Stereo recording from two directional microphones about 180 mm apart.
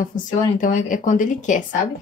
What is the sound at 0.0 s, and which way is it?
A woman's voice, 50° left (ahead or behind).